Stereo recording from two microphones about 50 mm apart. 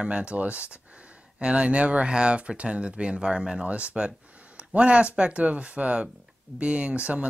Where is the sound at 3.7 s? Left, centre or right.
Right.